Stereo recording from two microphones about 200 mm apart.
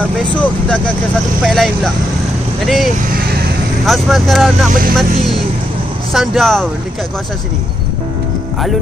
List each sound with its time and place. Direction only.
0.0 s speech: 5° left (ahead or behind)
3.2 s vehicle: 50° right (ahead or behind)
3.8 s speech: centre (ahead or behind)
6.1 s speech: centre (ahead or behind)